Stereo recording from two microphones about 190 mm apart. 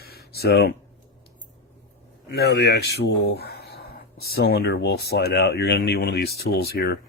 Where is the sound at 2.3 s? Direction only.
60° left (ahead or behind).